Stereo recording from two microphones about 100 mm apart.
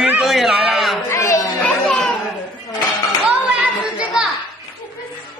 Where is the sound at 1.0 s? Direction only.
30° left (ahead or behind).